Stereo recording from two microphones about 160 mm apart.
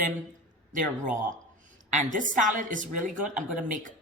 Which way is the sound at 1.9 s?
55° right (ahead or behind).